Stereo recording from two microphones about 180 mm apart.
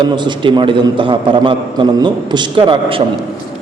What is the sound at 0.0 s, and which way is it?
A man's voice, 25° right (ahead or behind).